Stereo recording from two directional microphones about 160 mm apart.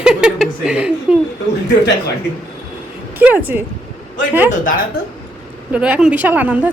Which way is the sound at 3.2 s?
10° right (ahead or behind).